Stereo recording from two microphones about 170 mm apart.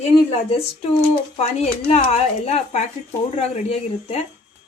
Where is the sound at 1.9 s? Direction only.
35° left (ahead or behind).